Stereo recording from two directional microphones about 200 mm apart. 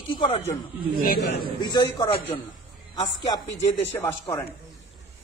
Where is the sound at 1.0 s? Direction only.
50° left (ahead or behind).